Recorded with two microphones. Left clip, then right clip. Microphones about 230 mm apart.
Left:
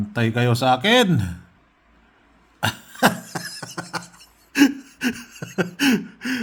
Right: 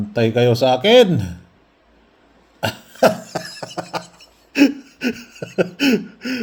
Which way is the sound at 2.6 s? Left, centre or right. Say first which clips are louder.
Right 4 dB; left.